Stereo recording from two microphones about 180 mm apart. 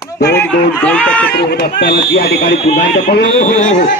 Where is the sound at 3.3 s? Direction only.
40° left (ahead or behind).